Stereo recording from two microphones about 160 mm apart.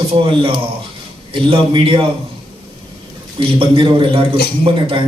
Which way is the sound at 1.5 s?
30° right (ahead or behind).